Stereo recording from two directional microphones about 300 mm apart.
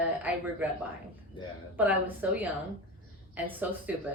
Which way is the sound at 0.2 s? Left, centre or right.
Centre.